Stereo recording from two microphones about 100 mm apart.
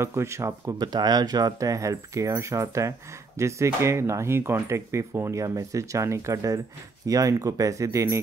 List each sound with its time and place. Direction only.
0.0 s speech: 30° right (ahead or behind)